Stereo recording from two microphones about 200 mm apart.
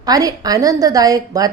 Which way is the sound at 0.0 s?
20° right (ahead or behind).